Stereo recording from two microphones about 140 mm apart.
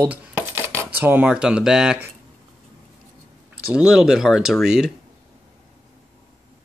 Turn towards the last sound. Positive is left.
turn(degrees=-5)  # may be behind; listen again after turning